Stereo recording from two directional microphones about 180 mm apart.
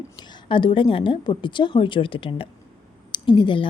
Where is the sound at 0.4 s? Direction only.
30° left (ahead or behind).